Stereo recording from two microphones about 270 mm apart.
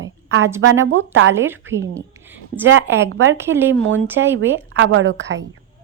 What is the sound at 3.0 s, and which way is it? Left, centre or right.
Speech, right.